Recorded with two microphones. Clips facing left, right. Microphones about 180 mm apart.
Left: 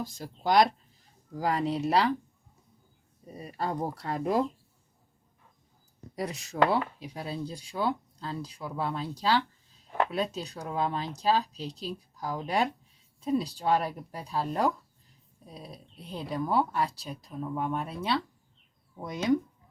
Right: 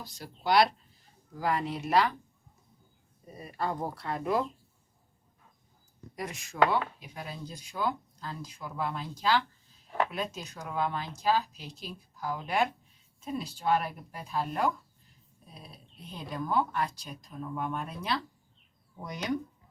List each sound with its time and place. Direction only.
0.0 s speech: 45° left (ahead or behind)
3.6 s speech: 40° left (ahead or behind)
6.1 s speech: 35° left (ahead or behind)